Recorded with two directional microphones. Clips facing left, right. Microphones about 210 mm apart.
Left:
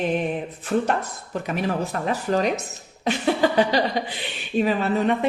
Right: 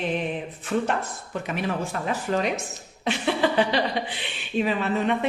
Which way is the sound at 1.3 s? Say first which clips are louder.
Left 3 dB; 40° left (ahead or behind).